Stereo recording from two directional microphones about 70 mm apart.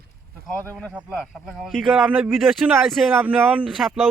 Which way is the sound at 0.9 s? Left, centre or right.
Centre.